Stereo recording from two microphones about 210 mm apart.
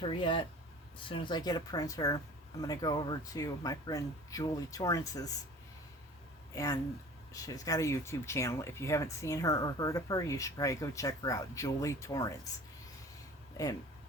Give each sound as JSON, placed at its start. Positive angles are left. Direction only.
{"t": 0.0, "sound": "speech", "side_deg": 25}
{"t": 6.5, "sound": "speech", "side_deg": 15}